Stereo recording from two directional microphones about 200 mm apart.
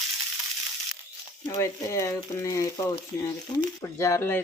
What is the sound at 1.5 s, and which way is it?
Speech, 15° left (ahead or behind).